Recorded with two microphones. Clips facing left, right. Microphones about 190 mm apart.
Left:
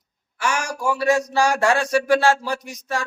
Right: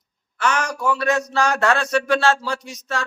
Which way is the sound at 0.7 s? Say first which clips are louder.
Left 1 dB; 10° left (ahead or behind).